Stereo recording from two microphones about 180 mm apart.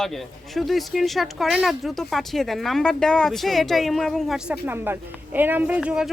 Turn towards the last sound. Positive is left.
turn(degrees=-5)  # may be behind; listen again after turning